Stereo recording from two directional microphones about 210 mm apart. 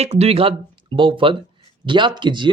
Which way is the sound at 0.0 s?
30° right (ahead or behind).